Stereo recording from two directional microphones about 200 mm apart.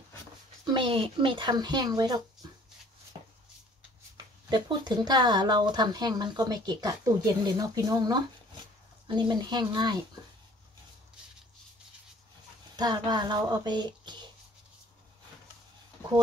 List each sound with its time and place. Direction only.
0.7 s speech: 25° right (ahead or behind)
4.5 s speech: 20° right (ahead or behind)
12.7 s speech: 20° right (ahead or behind)